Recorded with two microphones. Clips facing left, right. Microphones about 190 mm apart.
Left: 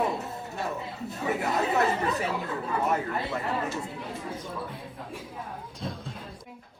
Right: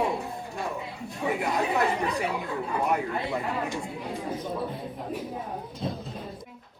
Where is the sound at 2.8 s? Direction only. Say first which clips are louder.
Right 1 dB; 15° right (ahead or behind).